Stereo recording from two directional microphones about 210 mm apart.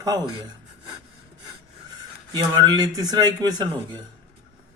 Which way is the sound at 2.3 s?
20° right (ahead or behind).